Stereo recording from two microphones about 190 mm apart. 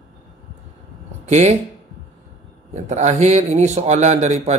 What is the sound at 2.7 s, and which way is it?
A man's voice, 35° right (ahead or behind).